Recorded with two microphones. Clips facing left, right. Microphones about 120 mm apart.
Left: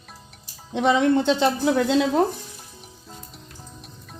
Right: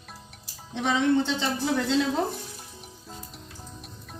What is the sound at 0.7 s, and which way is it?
Speech, 60° left (ahead or behind).